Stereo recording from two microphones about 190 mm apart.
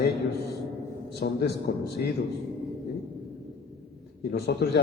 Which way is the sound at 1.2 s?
60° left (ahead or behind).